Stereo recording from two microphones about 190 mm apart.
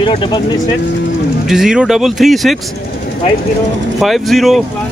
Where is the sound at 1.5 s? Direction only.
5° right (ahead or behind).